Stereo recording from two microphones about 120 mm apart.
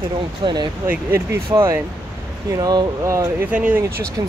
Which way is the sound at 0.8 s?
25° right (ahead or behind).